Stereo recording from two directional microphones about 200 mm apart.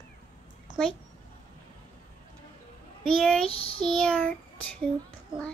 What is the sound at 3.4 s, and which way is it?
Child singing, 30° left (ahead or behind).